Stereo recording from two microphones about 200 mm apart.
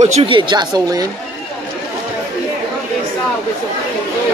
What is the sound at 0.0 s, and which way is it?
Speech, 30° right (ahead or behind).